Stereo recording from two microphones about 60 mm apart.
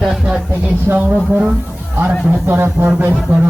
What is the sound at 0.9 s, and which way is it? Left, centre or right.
Speech, right.